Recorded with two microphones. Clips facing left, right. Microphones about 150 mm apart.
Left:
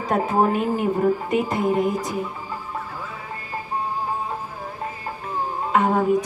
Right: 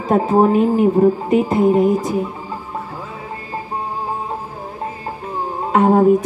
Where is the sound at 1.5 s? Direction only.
30° right (ahead or behind).